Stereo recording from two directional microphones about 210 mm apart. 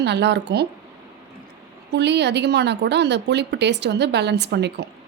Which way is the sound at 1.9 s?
55° right (ahead or behind).